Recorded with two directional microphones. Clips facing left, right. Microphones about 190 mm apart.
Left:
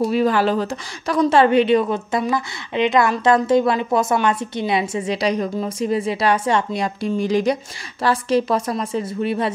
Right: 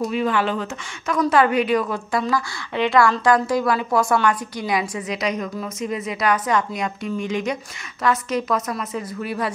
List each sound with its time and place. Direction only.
0.0 s a woman's voice: 35° left (ahead or behind)